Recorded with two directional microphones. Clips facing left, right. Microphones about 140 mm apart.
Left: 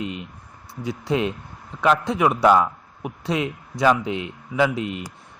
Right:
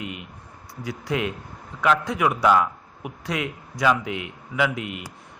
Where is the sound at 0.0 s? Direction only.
25° left (ahead or behind).